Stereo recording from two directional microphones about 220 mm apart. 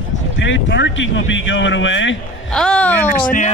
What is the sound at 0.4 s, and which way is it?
A man's voice, 55° left (ahead or behind).